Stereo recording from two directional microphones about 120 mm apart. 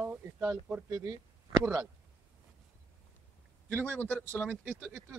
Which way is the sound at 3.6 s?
15° right (ahead or behind).